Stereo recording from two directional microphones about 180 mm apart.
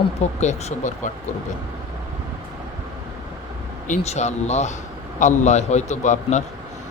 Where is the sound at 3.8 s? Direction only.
40° left (ahead or behind).